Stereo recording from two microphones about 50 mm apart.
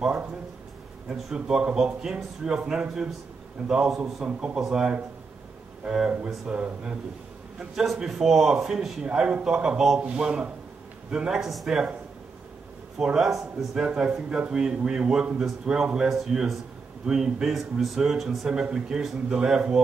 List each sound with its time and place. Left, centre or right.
1.1 s speech: centre
7.7 s a man's voice: centre
13.0 s speech: centre
18.5 s speech: centre